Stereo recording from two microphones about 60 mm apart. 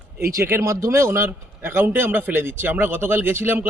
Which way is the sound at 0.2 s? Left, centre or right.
Right.